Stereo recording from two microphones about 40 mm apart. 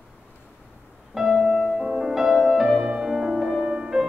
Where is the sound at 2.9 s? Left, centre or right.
Centre.